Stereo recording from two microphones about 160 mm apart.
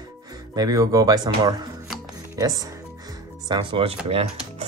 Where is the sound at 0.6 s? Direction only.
25° right (ahead or behind).